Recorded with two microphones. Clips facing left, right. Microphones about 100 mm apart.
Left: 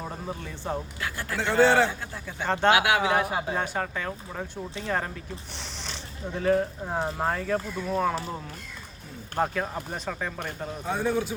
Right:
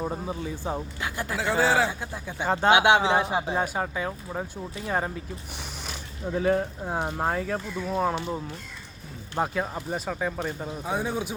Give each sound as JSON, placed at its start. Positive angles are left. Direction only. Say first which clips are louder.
{"t": 0.0, "sound": "speech", "louder": "right 4 dB", "side_deg": -10}
{"t": 1.4, "sound": "a man's voice", "louder": "left 3 dB", "side_deg": -5}
{"t": 2.7, "sound": "speech", "louder": "right 3 dB", "side_deg": -25}
{"t": 9.4, "sound": "speech", "louder": "even", "side_deg": -10}